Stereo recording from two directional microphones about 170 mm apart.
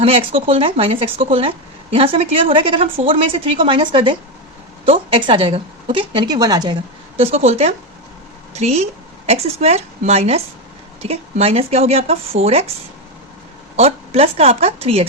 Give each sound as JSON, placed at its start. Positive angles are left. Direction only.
{"t": 0.0, "sound": "a woman's voice", "side_deg": -35}
{"t": 7.2, "sound": "a woman's voice", "side_deg": -35}
{"t": 13.7, "sound": "speech", "side_deg": -35}